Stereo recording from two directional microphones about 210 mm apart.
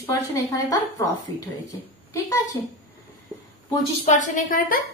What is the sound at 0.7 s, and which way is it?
Speech, 15° left (ahead or behind).